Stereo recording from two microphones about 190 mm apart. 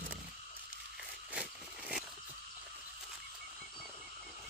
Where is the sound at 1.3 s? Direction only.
5° right (ahead or behind).